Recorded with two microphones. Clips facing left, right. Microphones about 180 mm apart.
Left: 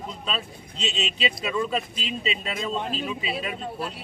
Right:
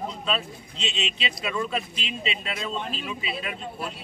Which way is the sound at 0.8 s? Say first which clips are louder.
Left 3 dB; 40° left (ahead or behind).